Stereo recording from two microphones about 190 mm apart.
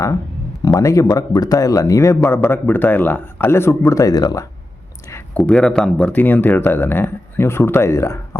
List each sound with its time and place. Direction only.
0.6 s speech: 15° left (ahead or behind)